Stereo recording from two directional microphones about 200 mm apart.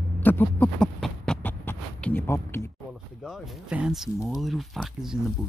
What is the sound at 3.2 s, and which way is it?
Speech, centre (ahead or behind).